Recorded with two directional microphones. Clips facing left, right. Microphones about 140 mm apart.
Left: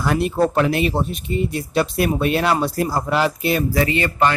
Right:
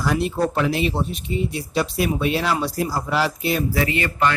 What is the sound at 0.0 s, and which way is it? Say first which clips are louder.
Speech: left 3 dB; 55° left (ahead or behind).